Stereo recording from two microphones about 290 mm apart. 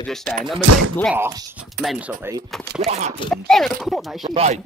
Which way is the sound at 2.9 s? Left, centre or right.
Right.